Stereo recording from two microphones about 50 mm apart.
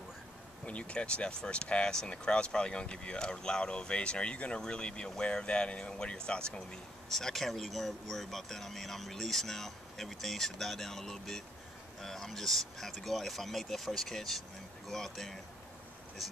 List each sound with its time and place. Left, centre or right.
0.7 s speech: left
7.1 s speech: centre